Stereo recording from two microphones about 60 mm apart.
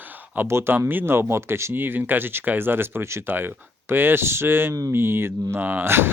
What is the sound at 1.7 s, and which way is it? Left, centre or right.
Speech, right.